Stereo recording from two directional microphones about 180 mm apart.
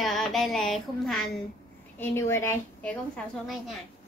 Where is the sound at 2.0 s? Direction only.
15° left (ahead or behind).